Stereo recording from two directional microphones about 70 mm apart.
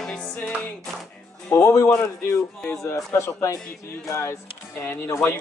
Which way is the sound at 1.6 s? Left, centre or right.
Left.